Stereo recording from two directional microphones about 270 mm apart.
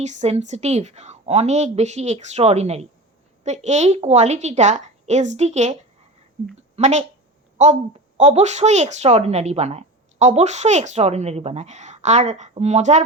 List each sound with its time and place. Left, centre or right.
0.0 s a woman's voice: right